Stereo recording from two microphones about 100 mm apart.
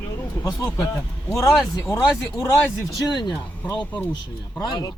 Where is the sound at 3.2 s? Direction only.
50° left (ahead or behind).